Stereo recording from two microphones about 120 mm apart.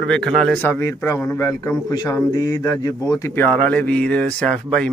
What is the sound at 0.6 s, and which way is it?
A man's voice, 20° left (ahead or behind).